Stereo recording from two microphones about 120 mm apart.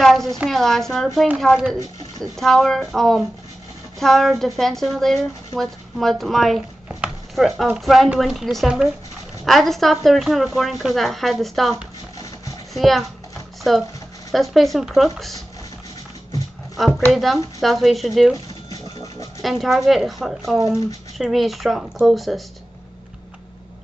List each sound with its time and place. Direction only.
0.0 s a sound: centre (ahead or behind)
0.5 s speech: centre (ahead or behind)
12.7 s speech: centre (ahead or behind)
14.3 s speech: centre (ahead or behind)
16.7 s a woman's voice: centre (ahead or behind)
18.3 s a sound: 30° left (ahead or behind)
19.4 s speech: centre (ahead or behind)